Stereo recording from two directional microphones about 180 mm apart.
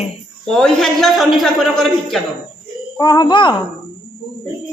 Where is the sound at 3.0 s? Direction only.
20° left (ahead or behind).